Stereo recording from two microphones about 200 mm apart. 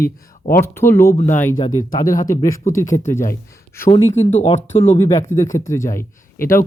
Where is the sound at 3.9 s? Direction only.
30° left (ahead or behind).